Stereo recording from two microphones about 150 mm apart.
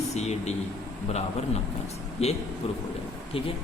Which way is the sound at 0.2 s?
50° left (ahead or behind).